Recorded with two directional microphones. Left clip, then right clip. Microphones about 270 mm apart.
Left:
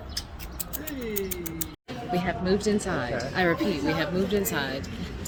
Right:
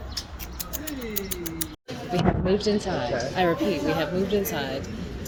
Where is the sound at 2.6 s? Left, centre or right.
Left.